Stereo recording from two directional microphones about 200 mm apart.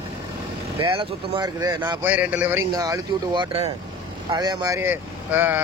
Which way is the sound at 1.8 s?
10° right (ahead or behind).